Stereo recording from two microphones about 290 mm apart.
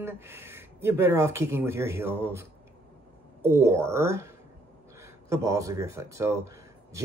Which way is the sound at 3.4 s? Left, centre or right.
Centre.